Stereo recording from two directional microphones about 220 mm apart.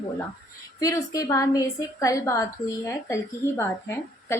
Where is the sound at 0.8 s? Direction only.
15° left (ahead or behind).